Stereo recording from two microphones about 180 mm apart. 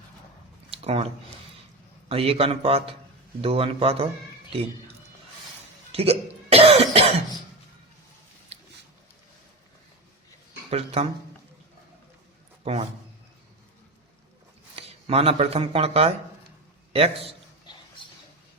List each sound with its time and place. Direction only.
0.7 s a sound: 35° right (ahead or behind)
2.0 s a man's voice: 30° right (ahead or behind)
5.9 s cough: 35° right (ahead or behind)
8.5 s a sound: 35° right (ahead or behind)
10.7 s a man's voice: 35° right (ahead or behind)
12.7 s a man's voice: 35° right (ahead or behind)
14.8 s a man's voice: 35° right (ahead or behind)